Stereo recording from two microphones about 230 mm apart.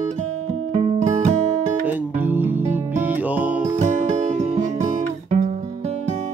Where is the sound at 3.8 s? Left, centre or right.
Right.